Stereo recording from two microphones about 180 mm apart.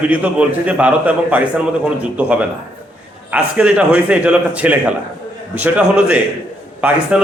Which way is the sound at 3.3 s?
5° right (ahead or behind).